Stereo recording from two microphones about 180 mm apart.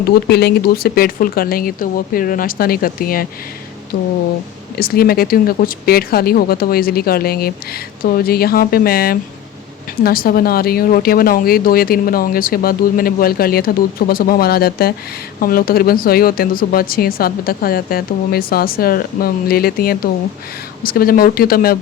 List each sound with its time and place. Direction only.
0.3 s a woman's voice: 65° left (ahead or behind)
3.9 s a sound: 55° left (ahead or behind)
4.8 s a woman's voice: 55° left (ahead or behind)